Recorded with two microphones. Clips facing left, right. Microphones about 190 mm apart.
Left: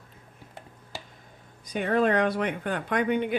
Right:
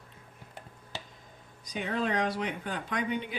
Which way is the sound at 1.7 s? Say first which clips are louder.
Left 7 dB; 55° left (ahead or behind).